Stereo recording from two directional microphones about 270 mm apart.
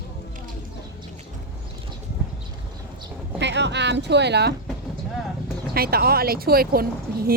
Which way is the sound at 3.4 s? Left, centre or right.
Right.